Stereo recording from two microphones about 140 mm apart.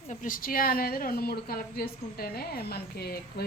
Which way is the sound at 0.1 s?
70° left (ahead or behind).